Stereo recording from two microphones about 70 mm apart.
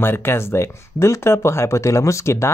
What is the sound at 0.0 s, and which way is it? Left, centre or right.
Speech, left.